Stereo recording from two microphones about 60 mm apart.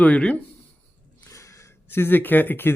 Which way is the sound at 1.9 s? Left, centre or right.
Left.